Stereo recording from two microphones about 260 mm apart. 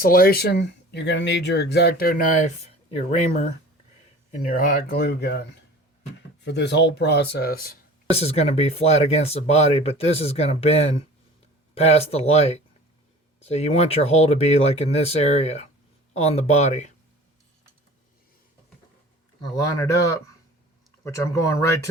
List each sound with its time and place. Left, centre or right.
0.0 s speech: left
6.4 s speech: left
8.1 s speech: left
19.5 s speech: centre